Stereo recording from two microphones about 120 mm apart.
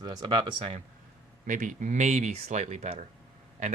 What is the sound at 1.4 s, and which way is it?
Speech, 90° right.